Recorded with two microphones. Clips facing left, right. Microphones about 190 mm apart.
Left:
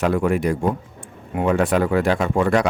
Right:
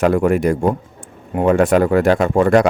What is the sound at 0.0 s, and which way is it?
Speech, 45° right (ahead or behind).